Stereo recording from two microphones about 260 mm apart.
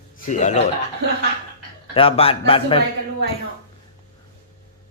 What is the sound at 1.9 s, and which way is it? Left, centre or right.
Speech, left.